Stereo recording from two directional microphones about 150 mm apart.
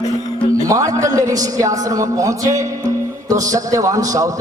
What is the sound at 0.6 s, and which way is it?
A man's voice, 20° right (ahead or behind).